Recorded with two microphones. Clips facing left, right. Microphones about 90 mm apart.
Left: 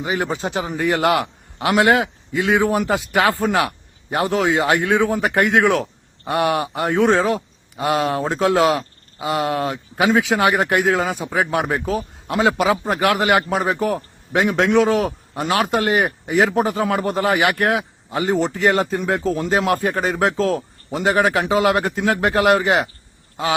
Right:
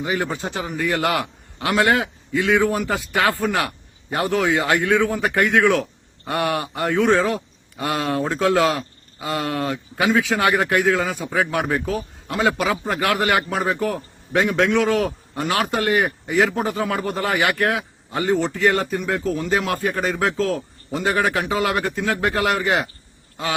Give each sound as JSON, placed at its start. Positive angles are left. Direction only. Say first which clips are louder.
{"t": 0.0, "sound": "speech", "louder": "left 2 dB", "side_deg": 20}